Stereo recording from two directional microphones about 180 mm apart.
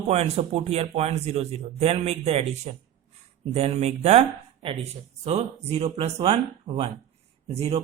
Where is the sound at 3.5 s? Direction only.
35° right (ahead or behind).